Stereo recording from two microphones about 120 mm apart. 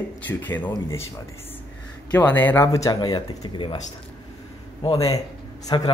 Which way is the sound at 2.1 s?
15° left (ahead or behind).